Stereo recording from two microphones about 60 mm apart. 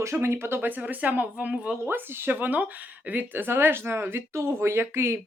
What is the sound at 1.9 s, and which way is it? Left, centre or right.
Speech, right.